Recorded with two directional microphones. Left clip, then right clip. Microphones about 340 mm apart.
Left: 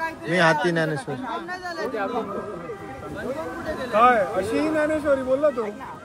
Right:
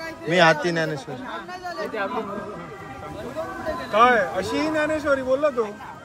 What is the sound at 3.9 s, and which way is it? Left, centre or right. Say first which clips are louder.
A man's voice: even; right.